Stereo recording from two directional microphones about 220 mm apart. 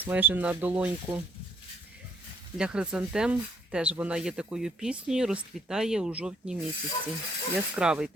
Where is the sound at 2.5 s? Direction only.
5° right (ahead or behind).